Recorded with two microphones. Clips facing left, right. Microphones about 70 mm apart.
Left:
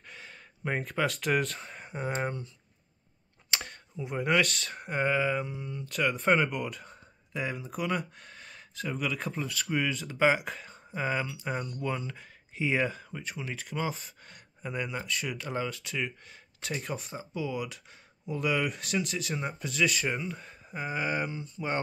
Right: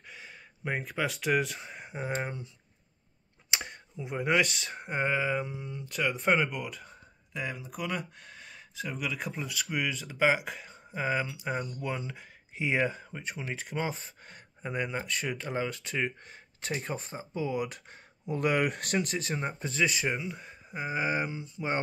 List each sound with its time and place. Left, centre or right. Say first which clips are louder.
0.1 s speech: even; centre
3.4 s a sound: even; centre
3.9 s speech: even; centre
5.9 s speech: left 1 dB; centre
11.8 s speech: left 2 dB; centre
15.7 s speech: right 2 dB; right
17.5 s speech: right 2 dB; right
20.1 s speech: even; centre